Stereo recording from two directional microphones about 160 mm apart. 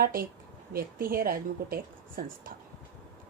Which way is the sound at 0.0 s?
70° right (ahead or behind).